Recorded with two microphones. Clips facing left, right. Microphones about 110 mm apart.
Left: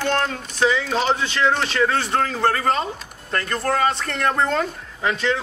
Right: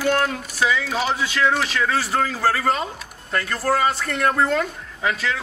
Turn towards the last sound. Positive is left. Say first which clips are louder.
# left 1 dB
turn(degrees=-5)  # may be behind; listen again after turning